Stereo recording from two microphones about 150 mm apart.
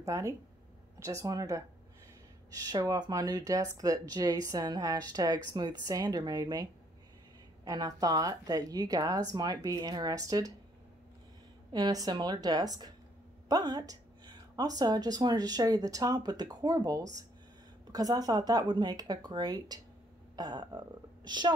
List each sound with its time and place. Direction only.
0.0 s speech: 20° right (ahead or behind)
11.7 s speech: 25° right (ahead or behind)